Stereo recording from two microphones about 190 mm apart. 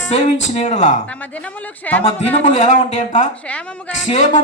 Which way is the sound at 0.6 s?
40° left (ahead or behind).